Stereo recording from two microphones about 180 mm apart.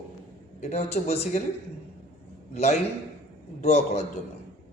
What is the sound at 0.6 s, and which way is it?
Speech, 35° left (ahead or behind).